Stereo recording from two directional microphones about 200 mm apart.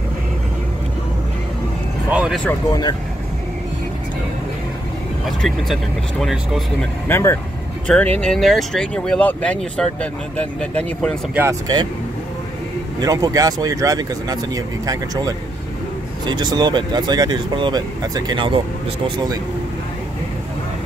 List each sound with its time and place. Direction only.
2.0 s a sound: 5° right (ahead or behind)
6.2 s speech: centre (ahead or behind)
7.1 s speech: 10° left (ahead or behind)
11.3 s speech: 15° right (ahead or behind)
13.0 s speech: 20° right (ahead or behind)